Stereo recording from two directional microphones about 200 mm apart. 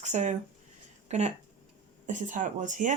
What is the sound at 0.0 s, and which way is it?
A woman's voice, 35° right (ahead or behind).